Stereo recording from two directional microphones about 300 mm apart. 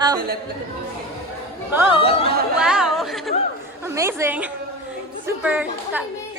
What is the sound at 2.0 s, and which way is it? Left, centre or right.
Speech, centre.